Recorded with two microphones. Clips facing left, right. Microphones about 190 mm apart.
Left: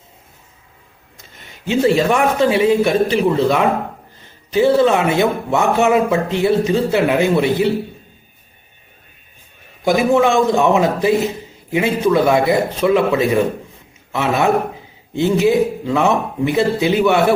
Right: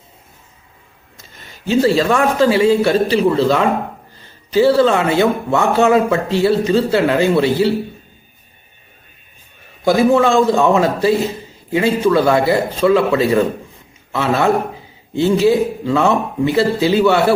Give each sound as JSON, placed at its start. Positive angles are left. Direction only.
{"t": 1.6, "sound": "speech", "side_deg": 20}
{"t": 9.8, "sound": "a man's voice", "side_deg": 15}